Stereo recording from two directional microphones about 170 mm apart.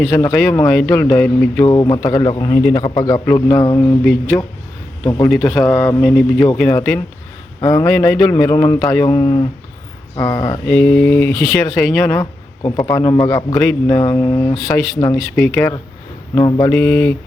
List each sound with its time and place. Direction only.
0.1 s speech: 10° left (ahead or behind)
1.6 s a man's voice: 20° left (ahead or behind)
5.0 s a man's voice: 25° left (ahead or behind)
5.4 s a man's voice: 10° left (ahead or behind)
6.7 s a man's voice: 15° left (ahead or behind)
10.7 s speech: 10° left (ahead or behind)
12.0 s a sound: 15° left (ahead or behind)
12.8 s a man's voice: 20° left (ahead or behind)
16.3 s speech: 25° left (ahead or behind)